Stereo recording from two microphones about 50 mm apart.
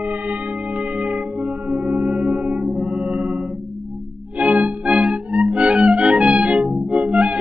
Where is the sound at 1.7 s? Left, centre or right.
Right.